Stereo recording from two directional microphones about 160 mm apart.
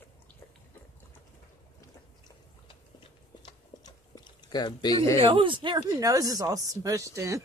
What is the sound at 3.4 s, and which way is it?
Chewing, 25° left (ahead or behind).